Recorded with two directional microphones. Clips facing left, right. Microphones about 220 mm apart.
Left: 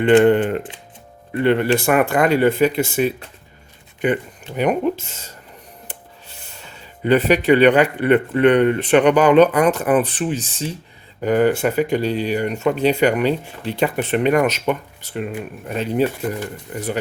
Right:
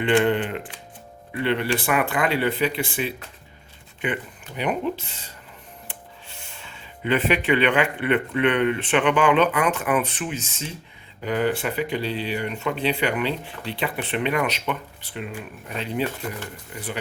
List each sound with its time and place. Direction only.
0.2 s speech: 40° left (ahead or behind)
11.2 s speech: 45° left (ahead or behind)